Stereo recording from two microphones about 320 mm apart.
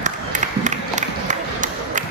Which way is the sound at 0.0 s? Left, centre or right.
Right.